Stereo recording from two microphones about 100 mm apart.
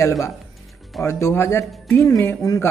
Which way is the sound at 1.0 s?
25° left (ahead or behind).